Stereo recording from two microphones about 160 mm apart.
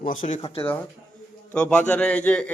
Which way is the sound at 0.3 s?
40° left (ahead or behind).